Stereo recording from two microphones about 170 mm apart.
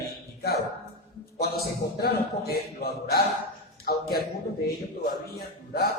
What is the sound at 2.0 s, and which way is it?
Speech, 65° left (ahead or behind).